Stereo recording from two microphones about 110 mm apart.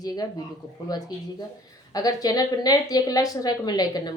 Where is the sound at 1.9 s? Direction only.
35° left (ahead or behind).